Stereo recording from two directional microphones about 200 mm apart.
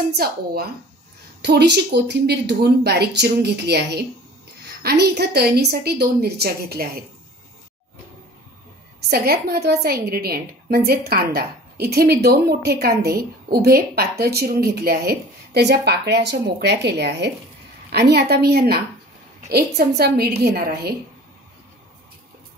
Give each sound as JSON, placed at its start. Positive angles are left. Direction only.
{"t": 0.1, "sound": "a woman's voice", "side_deg": -50}
{"t": 9.1, "sound": "a woman's voice", "side_deg": -50}